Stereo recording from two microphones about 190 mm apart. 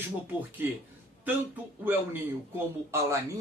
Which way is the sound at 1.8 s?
10° right (ahead or behind).